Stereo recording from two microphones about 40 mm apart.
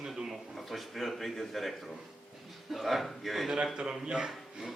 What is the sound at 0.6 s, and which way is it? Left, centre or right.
A man's voice, centre.